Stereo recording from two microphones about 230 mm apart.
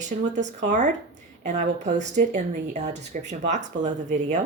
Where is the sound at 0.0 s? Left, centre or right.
Right.